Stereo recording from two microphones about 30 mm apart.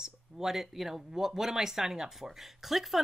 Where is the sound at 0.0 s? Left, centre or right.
Centre.